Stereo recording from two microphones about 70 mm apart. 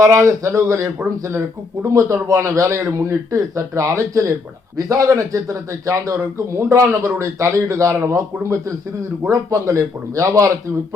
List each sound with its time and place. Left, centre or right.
0.0 s speech: right